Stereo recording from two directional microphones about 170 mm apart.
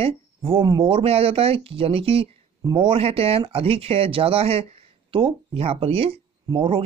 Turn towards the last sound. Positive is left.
turn(degrees=-30)  # may be behind; listen again after turning